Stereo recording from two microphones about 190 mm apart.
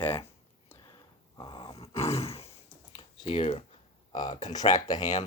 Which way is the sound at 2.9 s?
30° left (ahead or behind).